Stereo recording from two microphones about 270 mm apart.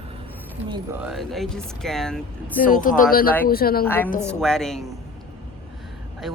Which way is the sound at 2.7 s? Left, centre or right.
Left.